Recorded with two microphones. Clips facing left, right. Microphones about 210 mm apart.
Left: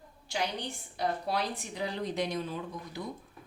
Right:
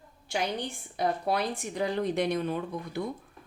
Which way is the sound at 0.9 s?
55° right (ahead or behind).